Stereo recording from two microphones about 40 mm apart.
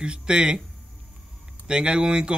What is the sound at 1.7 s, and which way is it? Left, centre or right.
Speech, right.